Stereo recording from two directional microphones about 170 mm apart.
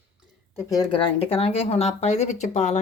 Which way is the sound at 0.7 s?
25° left (ahead or behind).